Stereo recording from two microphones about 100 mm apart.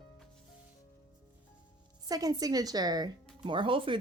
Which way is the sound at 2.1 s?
40° right (ahead or behind).